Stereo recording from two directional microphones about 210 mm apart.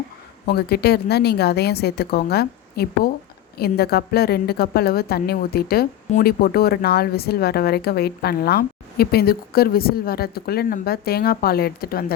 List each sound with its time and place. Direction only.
0.4 s a woman's voice: 50° left (ahead or behind)